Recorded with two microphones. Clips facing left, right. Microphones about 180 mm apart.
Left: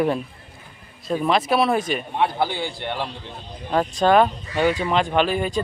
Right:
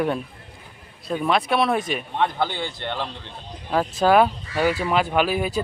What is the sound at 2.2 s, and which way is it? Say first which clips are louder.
Speech: left 1 dB; 10° left (ahead or behind).